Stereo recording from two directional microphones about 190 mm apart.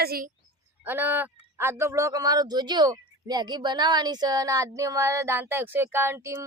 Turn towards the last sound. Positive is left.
turn(degrees=-15)  # may be behind; listen again after turning